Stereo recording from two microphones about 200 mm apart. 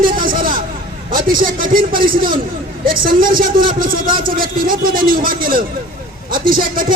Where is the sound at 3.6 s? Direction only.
25° right (ahead or behind).